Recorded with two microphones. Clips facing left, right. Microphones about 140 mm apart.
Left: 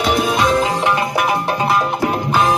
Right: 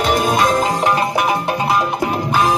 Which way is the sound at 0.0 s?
45° right (ahead or behind).